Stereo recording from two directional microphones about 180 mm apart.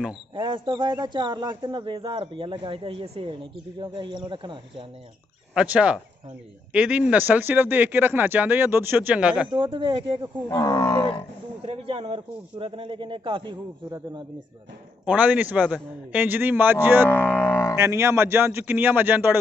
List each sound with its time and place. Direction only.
0.4 s speech: 25° right (ahead or behind)
5.5 s speech: 5° right (ahead or behind)
9.5 s speech: 30° right (ahead or behind)
10.5 s speech: 20° left (ahead or behind)
11.6 s speech: 30° right (ahead or behind)
15.0 s speech: 10° right (ahead or behind)
17.1 s speech: 10° left (ahead or behind)
17.7 s speech: 15° right (ahead or behind)